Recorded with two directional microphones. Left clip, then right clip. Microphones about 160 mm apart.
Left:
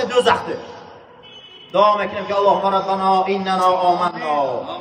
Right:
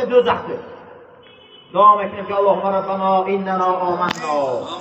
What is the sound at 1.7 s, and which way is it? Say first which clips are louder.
Speech: right 3 dB; 40° left (ahead or behind).